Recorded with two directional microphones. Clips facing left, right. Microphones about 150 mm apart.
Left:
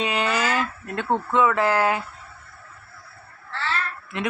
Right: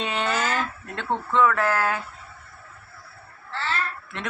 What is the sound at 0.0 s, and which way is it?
Speech, centre (ahead or behind).